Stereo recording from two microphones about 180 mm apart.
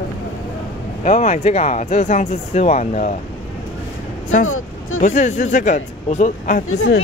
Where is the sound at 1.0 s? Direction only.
40° left (ahead or behind).